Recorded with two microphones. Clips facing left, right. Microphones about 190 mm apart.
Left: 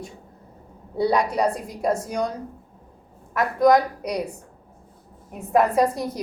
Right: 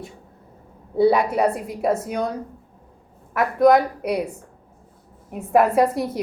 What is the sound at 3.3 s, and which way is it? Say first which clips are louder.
Speech: right 2 dB; 5° right (ahead or behind).